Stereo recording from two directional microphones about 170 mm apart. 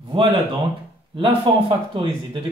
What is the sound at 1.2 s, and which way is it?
A man's voice, 30° right (ahead or behind).